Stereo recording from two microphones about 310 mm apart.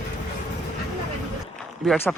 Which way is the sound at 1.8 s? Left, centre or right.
Centre.